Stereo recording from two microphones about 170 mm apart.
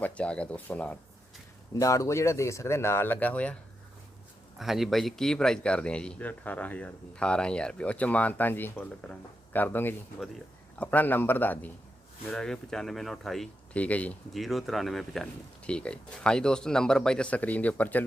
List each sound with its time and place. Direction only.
0.0 s speech: 5° left (ahead or behind)
1.8 s speech: 20° left (ahead or behind)
4.6 s speech: centre (ahead or behind)